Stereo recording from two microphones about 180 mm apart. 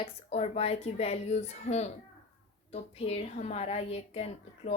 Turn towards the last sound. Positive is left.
turn(degrees=35)  # may be behind; listen again after turning